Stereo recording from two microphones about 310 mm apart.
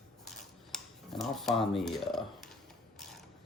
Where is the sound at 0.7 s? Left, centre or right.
Centre.